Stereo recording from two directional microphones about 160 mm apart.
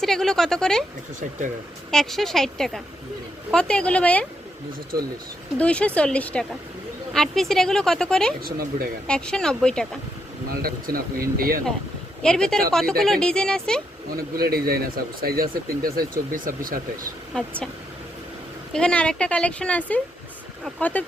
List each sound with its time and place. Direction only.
0.0 s speech: centre (ahead or behind)
1.9 s speech: centre (ahead or behind)
5.5 s speech: 5° left (ahead or behind)
8.4 s speech: 70° right (ahead or behind)
9.0 s speech: 5° left (ahead or behind)
10.5 s speech: 70° right (ahead or behind)
12.2 s speech: 5° left (ahead or behind)
14.1 s speech: 70° right (ahead or behind)
18.7 s speech: 5° left (ahead or behind)